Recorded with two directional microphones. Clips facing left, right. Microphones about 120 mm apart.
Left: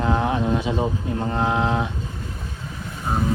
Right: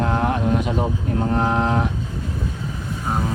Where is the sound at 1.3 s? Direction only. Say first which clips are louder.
Right 1 dB; centre (ahead or behind).